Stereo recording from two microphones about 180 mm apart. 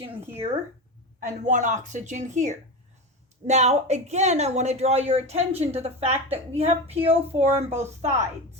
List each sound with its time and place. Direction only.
1.2 s a woman's voice: 45° right (ahead or behind)